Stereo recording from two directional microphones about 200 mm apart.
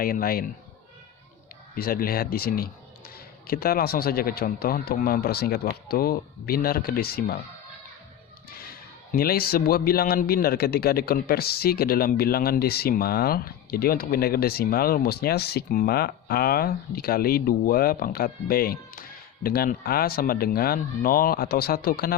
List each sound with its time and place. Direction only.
0.0 s speech: 45° left (ahead or behind)
1.7 s speech: 45° left (ahead or behind)
8.4 s speech: 50° left (ahead or behind)